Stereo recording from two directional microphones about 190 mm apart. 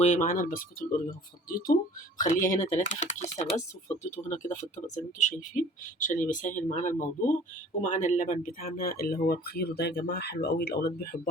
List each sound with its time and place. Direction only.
0.0 s speech: 40° left (ahead or behind)